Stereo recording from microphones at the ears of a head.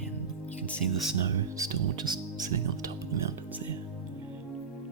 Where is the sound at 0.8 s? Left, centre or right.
Right.